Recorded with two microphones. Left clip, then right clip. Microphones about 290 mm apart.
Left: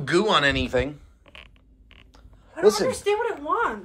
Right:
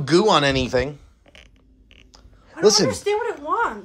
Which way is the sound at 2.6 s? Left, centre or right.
Right.